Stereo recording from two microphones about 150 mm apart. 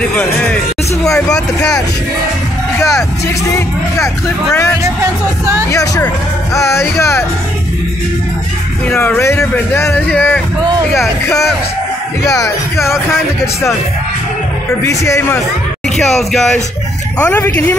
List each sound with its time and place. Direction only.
0.1 s speech: 10° left (ahead or behind)
3.5 s speech: 20° left (ahead or behind)
5.7 s speech: 20° left (ahead or behind)
8.8 s speech: 10° left (ahead or behind)
12.3 s speech: 20° left (ahead or behind)
14.9 s speech: 20° left (ahead or behind)
16.0 s speech: centre (ahead or behind)